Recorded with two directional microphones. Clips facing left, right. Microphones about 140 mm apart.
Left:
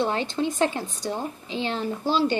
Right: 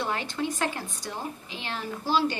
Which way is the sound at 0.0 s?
30° left (ahead or behind).